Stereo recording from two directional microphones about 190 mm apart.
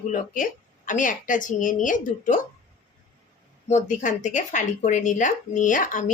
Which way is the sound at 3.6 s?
40° left (ahead or behind).